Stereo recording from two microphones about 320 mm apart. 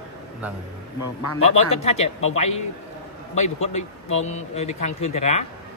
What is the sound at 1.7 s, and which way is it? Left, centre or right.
Speech, centre.